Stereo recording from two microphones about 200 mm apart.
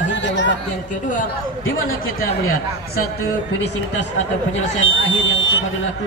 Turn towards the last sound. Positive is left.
turn(degrees=70)  # may be behind; listen again after turning